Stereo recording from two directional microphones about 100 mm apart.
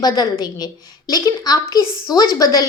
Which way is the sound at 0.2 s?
45° left (ahead or behind).